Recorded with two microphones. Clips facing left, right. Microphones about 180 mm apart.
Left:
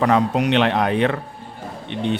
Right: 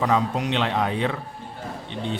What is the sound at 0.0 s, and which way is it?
Speech, 65° left (ahead or behind).